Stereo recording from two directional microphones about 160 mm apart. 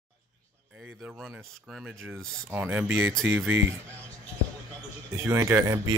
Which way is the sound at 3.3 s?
15° right (ahead or behind).